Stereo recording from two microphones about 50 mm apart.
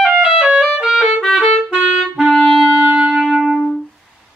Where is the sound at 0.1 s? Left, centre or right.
Centre.